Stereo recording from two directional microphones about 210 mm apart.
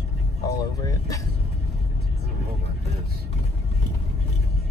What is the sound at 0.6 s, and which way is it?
Vehicle, 15° left (ahead or behind).